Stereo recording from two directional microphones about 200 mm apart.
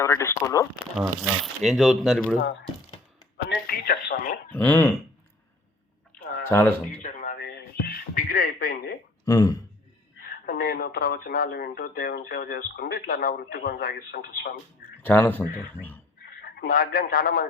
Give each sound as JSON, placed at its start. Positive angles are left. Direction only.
{"t": 0.0, "sound": "speech", "side_deg": 15}
{"t": 0.9, "sound": "speech", "side_deg": -5}
{"t": 3.3, "sound": "a sound", "side_deg": 50}
{"t": 4.5, "sound": "speech", "side_deg": 10}
{"t": 6.4, "sound": "speech", "side_deg": 10}
{"t": 7.0, "sound": "radio", "side_deg": 40}
{"t": 9.2, "sound": "speech", "side_deg": 15}
{"t": 10.2, "sound": "speech", "side_deg": 45}
{"t": 15.0, "sound": "speech", "side_deg": 10}
{"t": 16.4, "sound": "a man's voice", "side_deg": 45}